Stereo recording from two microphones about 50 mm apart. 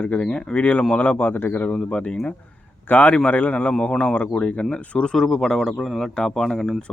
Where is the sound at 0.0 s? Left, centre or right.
Left.